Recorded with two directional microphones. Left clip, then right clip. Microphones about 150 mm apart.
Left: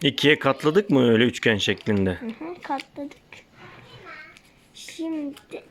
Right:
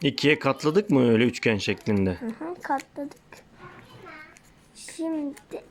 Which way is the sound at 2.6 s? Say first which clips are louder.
Right 1 dB; 20° left (ahead or behind).